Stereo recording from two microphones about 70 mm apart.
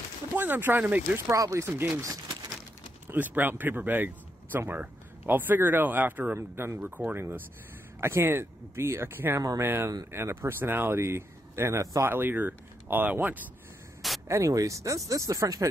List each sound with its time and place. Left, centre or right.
0.4 s speech: right
1.1 s speech: right
3.1 s speech: right
6.8 s speech: right
12.1 s speech: right
14.2 s speech: right